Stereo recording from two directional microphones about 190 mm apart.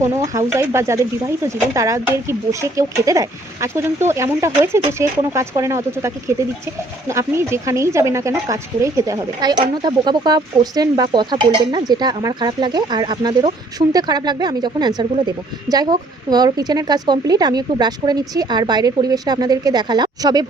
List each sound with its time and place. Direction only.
0.0 s a woman's voice: 15° right (ahead or behind)